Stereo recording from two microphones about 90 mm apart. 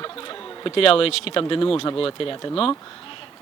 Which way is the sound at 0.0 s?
75° left (ahead or behind).